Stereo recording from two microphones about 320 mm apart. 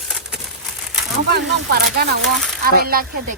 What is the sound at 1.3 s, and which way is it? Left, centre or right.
Speech, right.